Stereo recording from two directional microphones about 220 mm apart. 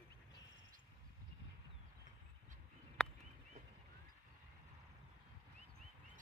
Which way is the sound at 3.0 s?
5° left (ahead or behind).